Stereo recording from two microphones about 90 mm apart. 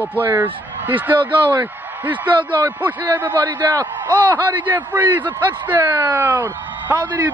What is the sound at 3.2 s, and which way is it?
A man's voice, 20° right (ahead or behind).